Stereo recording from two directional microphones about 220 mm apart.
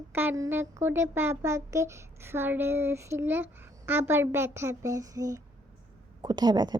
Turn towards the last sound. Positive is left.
turn(degrees=-20)  # may be behind; listen again after turning